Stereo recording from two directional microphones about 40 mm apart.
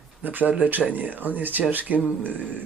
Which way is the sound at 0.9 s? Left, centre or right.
Right.